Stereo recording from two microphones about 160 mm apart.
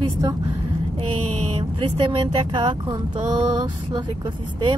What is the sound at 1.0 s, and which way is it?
Mantra, 35° right (ahead or behind).